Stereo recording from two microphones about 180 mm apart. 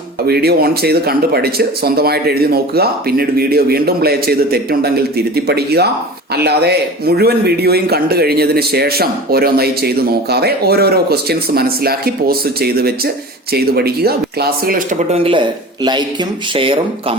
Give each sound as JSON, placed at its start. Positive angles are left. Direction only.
{"t": 0.3, "sound": "a man's voice", "side_deg": -60}
{"t": 15.1, "sound": "a man's voice", "side_deg": -30}